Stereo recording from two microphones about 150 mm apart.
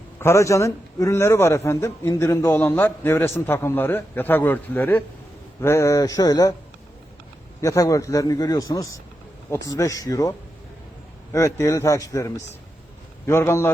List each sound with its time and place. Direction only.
0.2 s a man's voice: 20° left (ahead or behind)
7.6 s a man's voice: 20° left (ahead or behind)